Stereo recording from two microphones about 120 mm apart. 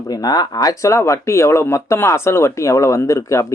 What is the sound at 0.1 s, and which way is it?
Speech, 35° left (ahead or behind).